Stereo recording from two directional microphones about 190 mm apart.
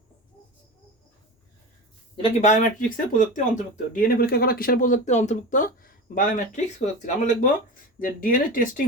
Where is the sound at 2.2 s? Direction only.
40° left (ahead or behind).